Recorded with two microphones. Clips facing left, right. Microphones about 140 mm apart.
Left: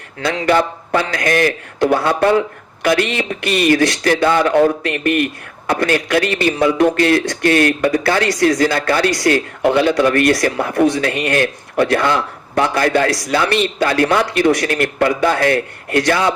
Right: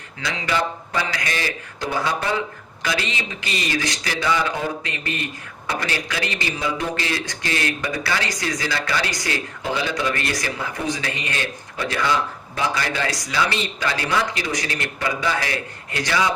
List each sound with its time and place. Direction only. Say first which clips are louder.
0.2 s a man's voice: left 9 dB; 55° left (ahead or behind)